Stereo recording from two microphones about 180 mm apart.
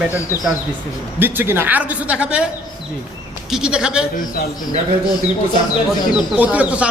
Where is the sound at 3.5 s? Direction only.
5° right (ahead or behind).